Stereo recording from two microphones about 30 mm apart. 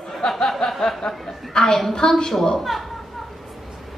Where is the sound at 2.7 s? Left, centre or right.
Centre.